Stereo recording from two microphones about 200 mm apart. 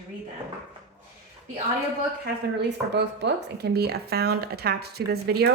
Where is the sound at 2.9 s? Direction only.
60° right (ahead or behind).